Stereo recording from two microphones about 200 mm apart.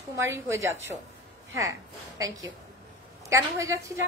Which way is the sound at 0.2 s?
15° right (ahead or behind).